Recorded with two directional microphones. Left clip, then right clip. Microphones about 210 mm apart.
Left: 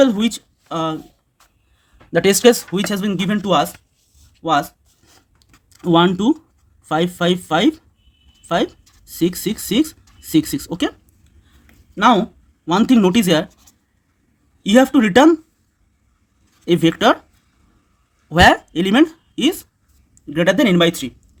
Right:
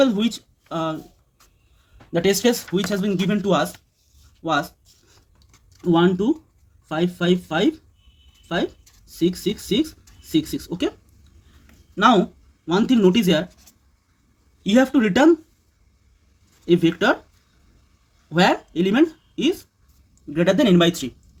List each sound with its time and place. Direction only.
0.0 s speech: 35° left (ahead or behind)
2.1 s speech: 30° left (ahead or behind)
4.4 s a sound: 35° left (ahead or behind)
5.5 s typing: 25° left (ahead or behind)
5.8 s speech: 55° left (ahead or behind)
9.0 s speech: 50° left (ahead or behind)
11.6 s a sound: 25° left (ahead or behind)
12.6 s speech: 45° left (ahead or behind)
14.6 s speech: 35° left (ahead or behind)
16.6 s speech: 45° left (ahead or behind)
18.3 s a woman's voice: 40° left (ahead or behind); by 21.1 s 25° left (ahead or behind)